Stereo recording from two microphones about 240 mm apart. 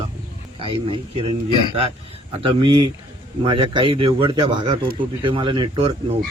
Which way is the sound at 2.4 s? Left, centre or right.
Right.